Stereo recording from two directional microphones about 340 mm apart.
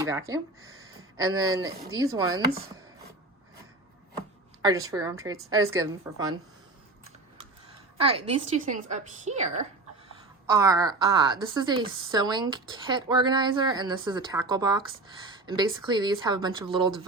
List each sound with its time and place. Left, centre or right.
1.1 s a woman's voice: centre
4.6 s a woman's voice: centre
7.9 s a woman's voice: centre
10.5 s a woman's voice: centre